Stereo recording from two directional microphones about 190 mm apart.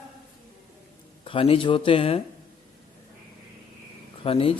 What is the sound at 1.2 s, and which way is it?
Speech, 30° left (ahead or behind).